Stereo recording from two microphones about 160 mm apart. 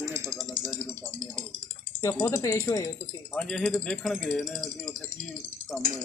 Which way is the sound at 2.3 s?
20° left (ahead or behind).